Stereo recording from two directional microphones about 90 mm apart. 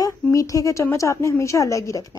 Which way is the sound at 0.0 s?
40° left (ahead or behind).